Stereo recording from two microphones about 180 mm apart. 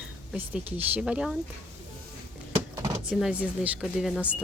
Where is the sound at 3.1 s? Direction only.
5° right (ahead or behind).